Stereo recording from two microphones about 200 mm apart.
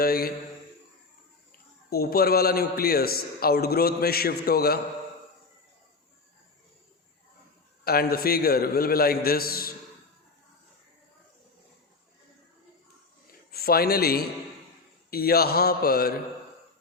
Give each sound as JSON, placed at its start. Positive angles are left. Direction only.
{"t": 0.0, "sound": "a man's voice", "side_deg": 50}
{"t": 1.9, "sound": "a man's voice", "side_deg": 50}
{"t": 7.9, "sound": "a man's voice", "side_deg": 50}
{"t": 13.5, "sound": "a man's voice", "side_deg": 50}